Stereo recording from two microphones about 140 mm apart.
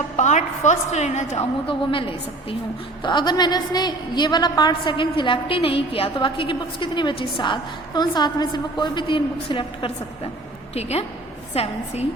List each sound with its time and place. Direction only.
0.2 s a woman's voice: 60° left (ahead or behind)
1.6 s a woman's voice: 40° left (ahead or behind)
10.8 s a woman's voice: 50° left (ahead or behind)